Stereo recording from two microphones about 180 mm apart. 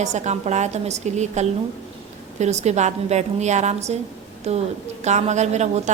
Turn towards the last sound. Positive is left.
turn(degrees=-40)  # may be behind; listen again after turning